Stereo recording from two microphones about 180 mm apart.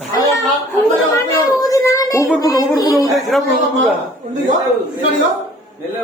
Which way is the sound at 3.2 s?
Centre (ahead or behind).